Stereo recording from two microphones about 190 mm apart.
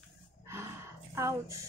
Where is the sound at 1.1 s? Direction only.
15° right (ahead or behind).